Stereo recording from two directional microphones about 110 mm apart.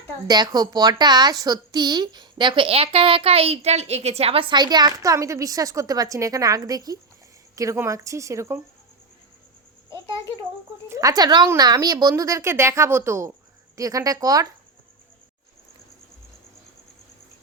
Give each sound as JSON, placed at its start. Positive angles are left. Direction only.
{"t": 0.3, "sound": "a woman's voice", "side_deg": -40}
{"t": 10.8, "sound": "speech", "side_deg": -30}